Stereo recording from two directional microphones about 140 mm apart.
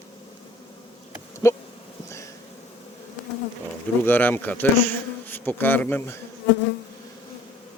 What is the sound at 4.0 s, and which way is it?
Speech, 15° left (ahead or behind).